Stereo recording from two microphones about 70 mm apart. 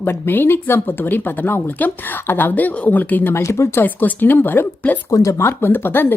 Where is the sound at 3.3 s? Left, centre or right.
Left.